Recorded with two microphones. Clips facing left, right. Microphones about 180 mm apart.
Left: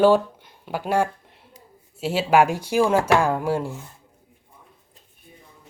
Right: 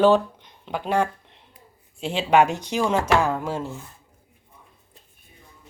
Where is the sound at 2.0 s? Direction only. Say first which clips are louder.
Left 1 dB; 5° left (ahead or behind).